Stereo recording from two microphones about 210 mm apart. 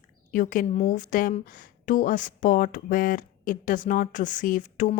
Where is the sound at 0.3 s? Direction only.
40° left (ahead or behind).